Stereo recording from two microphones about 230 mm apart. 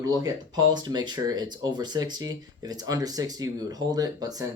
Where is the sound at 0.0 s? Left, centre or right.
Centre.